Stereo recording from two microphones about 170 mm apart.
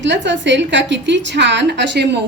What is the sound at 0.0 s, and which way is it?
A woman's voice, 90° right.